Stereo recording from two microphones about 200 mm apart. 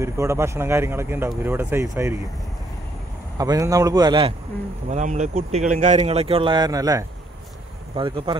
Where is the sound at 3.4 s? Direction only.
15° right (ahead or behind).